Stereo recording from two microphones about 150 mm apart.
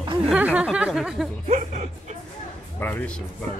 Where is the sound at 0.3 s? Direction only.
10° right (ahead or behind).